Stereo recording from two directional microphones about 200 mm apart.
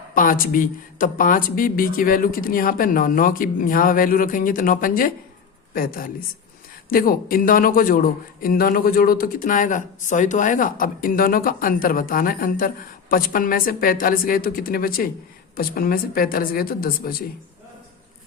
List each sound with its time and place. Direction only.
0.1 s speech: 45° left (ahead or behind)